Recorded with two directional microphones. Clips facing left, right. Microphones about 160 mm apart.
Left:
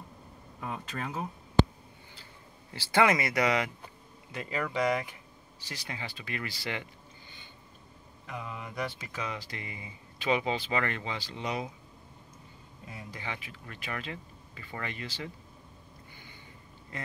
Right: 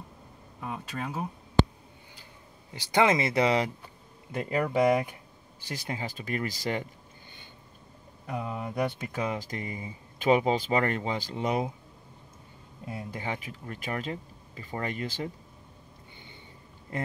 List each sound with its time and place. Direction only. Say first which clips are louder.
0.6 s speech: right 2 dB; 10° right (ahead or behind)
2.7 s speech: right 1 dB; 20° right (ahead or behind)
4.3 s speech: right 6 dB; 50° right (ahead or behind)
8.3 s speech: right 6 dB; 45° right (ahead or behind)
12.9 s speech: right 6 dB; 45° right (ahead or behind)